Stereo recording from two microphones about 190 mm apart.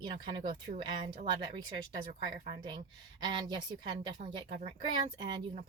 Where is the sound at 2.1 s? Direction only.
35° right (ahead or behind).